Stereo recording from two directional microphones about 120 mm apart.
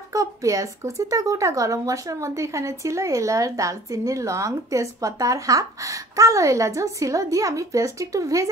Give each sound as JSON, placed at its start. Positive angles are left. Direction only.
{"t": 0.1, "sound": "speech", "side_deg": -30}